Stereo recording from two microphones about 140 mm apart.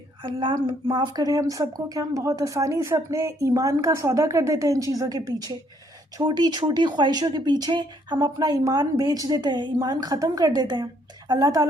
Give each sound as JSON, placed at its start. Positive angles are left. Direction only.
{"t": 0.2, "sound": "speech", "side_deg": -40}